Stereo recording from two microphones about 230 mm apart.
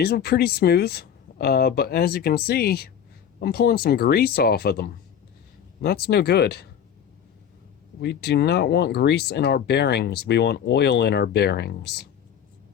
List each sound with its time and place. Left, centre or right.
0.0 s speech: left
8.0 s speech: left